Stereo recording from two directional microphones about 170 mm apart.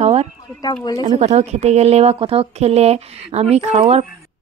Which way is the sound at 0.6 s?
25° left (ahead or behind).